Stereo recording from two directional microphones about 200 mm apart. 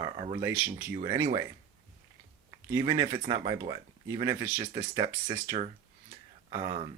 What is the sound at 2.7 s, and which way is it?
Speech, 15° right (ahead or behind).